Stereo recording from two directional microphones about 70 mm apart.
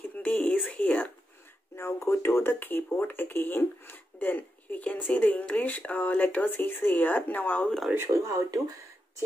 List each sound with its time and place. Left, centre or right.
0.1 s a sound: left
1.8 s speech: left
7.6 s speech: centre
8.1 s speech: right